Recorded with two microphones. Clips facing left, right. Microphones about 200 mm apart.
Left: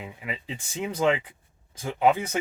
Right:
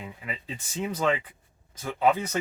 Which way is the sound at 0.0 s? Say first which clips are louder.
Left 2 dB; 15° left (ahead or behind).